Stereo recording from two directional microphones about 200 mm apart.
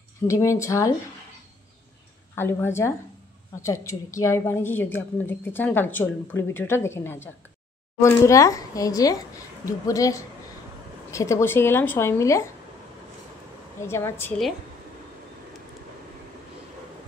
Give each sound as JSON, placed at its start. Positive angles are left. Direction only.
{"t": 0.3, "sound": "a woman's voice", "side_deg": 15}
{"t": 2.3, "sound": "a woman's voice", "side_deg": 10}
{"t": 13.8, "sound": "a woman's voice", "side_deg": 15}